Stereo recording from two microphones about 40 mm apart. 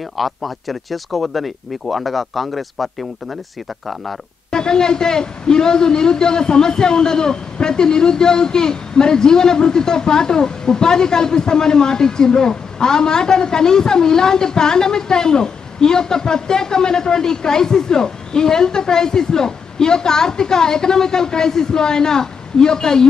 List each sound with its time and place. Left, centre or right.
0.2 s speech: centre
4.5 s a man's voice: centre